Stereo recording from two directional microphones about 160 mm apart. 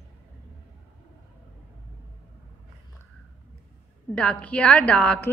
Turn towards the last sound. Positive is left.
turn(degrees=10)  # may be behind; listen again after turning